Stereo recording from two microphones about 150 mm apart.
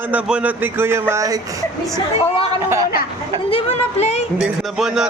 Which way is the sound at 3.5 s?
45° left (ahead or behind).